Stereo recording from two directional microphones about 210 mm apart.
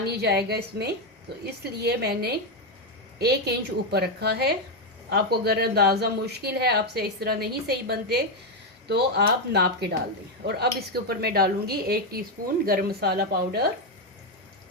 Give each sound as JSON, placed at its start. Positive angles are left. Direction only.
{"t": 0.0, "sound": "a woman's voice", "side_deg": -50}